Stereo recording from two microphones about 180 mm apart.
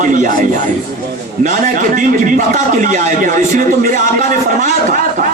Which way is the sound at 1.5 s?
50° right (ahead or behind).